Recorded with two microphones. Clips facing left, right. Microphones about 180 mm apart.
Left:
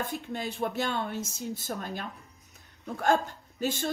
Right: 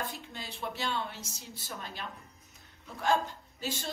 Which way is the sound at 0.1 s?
55° left (ahead or behind).